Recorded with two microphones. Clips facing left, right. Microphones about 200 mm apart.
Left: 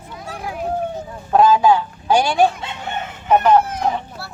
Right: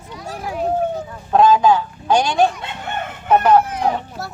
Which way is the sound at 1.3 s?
10° left (ahead or behind).